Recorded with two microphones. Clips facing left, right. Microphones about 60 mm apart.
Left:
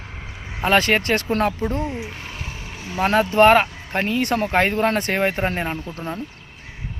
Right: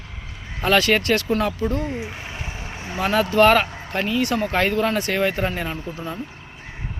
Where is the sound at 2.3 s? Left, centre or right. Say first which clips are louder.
Right 1 dB; right.